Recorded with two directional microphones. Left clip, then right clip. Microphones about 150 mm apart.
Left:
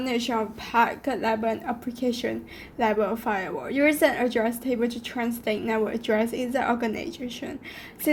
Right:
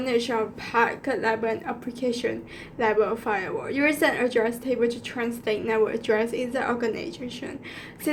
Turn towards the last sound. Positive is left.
turn(degrees=30)  # may be behind; listen again after turning